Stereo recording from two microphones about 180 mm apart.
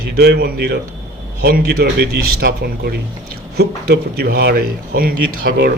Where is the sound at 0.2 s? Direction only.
60° right (ahead or behind).